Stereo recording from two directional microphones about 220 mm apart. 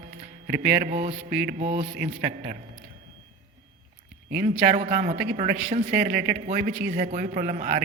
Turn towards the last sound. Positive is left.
turn(degrees=-40)  # may be behind; listen again after turning